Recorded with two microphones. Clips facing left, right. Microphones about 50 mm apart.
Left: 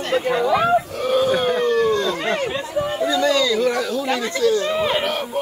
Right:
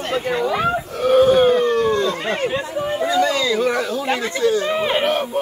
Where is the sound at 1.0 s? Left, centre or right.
Right.